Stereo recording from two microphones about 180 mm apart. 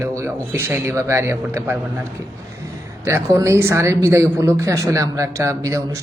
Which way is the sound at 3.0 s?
15° right (ahead or behind).